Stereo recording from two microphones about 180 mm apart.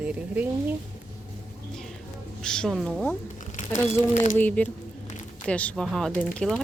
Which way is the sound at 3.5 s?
40° left (ahead or behind).